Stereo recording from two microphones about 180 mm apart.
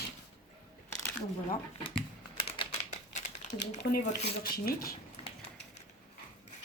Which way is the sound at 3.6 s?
70° left (ahead or behind).